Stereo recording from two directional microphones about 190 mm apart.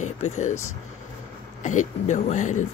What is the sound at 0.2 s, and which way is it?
Speech, 40° left (ahead or behind).